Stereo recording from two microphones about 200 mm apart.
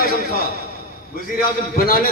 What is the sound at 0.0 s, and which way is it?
Speech, 50° left (ahead or behind).